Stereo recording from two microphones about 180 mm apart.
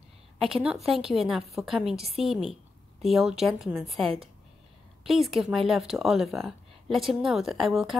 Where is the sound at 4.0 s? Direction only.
30° right (ahead or behind).